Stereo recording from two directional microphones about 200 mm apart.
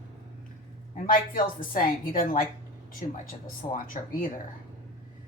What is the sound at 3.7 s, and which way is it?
Speech, 45° left (ahead or behind).